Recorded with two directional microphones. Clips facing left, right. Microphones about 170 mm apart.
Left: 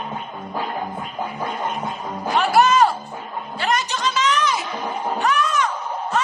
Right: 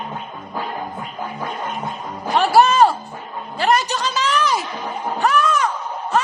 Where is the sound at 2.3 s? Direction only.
35° right (ahead or behind).